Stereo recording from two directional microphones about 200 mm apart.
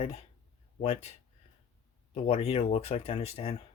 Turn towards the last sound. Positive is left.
turn(degrees=30)  # may be behind; listen again after turning